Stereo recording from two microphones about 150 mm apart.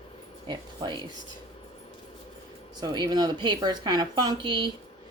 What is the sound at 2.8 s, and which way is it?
Speech, 30° right (ahead or behind).